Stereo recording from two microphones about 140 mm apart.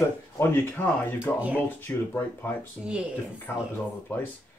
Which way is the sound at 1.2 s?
10° right (ahead or behind).